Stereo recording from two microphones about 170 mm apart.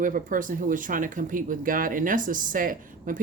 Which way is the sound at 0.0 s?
50° right (ahead or behind).